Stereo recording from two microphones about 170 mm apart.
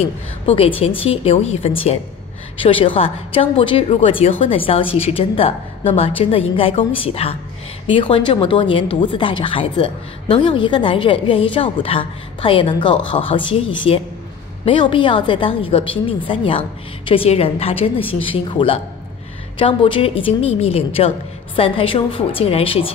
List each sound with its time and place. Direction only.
0.5 s a woman's voice: 35° left (ahead or behind)